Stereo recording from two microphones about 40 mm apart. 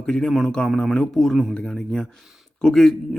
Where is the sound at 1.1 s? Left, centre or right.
Centre.